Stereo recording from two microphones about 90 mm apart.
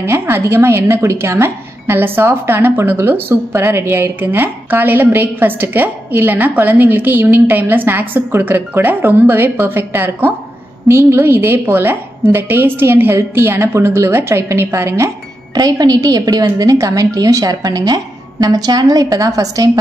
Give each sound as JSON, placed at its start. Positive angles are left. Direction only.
{"t": 0.0, "sound": "speech", "side_deg": -30}
{"t": 15.5, "sound": "a woman's voice", "side_deg": -45}